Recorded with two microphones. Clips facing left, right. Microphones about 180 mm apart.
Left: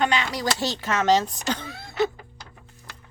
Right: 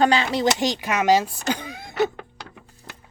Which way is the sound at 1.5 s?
15° right (ahead or behind).